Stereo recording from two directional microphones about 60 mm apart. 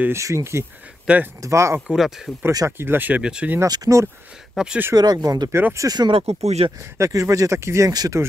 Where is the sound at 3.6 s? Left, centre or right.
Right.